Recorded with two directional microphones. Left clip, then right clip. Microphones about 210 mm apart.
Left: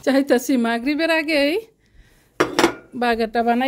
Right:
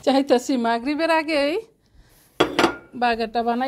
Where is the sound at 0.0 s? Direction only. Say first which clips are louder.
Left 1 dB; 20° left (ahead or behind).